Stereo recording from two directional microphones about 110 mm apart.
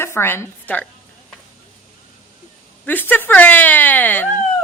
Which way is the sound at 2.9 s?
15° left (ahead or behind).